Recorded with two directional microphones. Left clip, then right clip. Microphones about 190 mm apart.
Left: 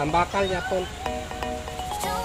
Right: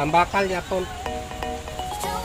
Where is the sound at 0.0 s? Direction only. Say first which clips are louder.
Right 3 dB; 35° right (ahead or behind).